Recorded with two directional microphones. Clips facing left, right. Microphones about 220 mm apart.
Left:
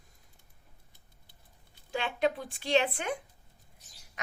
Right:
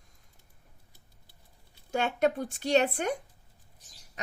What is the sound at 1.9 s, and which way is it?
A woman's voice, 45° right (ahead or behind).